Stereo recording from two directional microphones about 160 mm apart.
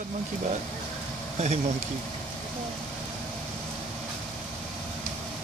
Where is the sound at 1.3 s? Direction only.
40° right (ahead or behind).